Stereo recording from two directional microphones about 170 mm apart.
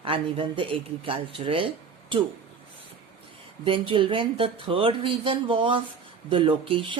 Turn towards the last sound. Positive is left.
turn(degrees=-30)  # may be behind; listen again after turning